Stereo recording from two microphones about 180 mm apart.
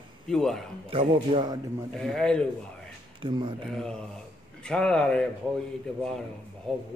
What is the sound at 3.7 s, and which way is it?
Speech, 5° left (ahead or behind).